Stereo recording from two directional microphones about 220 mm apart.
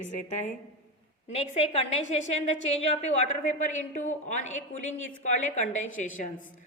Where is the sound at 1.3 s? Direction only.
30° left (ahead or behind).